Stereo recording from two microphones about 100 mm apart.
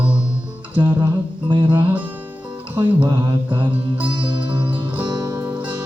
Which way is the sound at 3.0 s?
50° right (ahead or behind).